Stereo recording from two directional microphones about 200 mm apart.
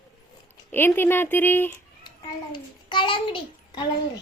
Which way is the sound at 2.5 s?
25° left (ahead or behind).